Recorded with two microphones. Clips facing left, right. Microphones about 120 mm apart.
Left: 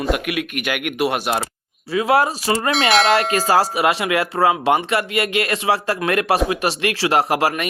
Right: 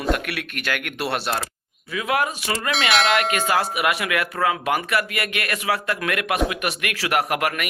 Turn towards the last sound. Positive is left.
turn(degrees=30)  # may be behind; listen again after turning